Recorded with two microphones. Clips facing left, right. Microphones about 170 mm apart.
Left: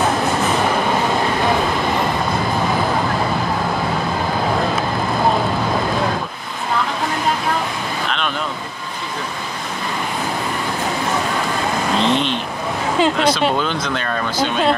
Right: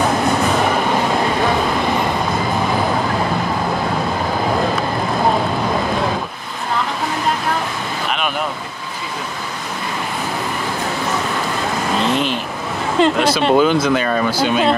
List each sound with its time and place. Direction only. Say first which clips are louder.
12.0 s vehicle: even; 5° right (ahead or behind)
13.0 s speech: right 2 dB; 5° right (ahead or behind)